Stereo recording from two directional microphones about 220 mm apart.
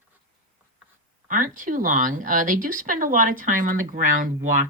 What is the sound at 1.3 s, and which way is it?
Speech, 35° right (ahead or behind).